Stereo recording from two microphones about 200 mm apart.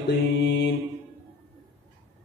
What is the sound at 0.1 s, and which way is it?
Mantra, 55° left (ahead or behind).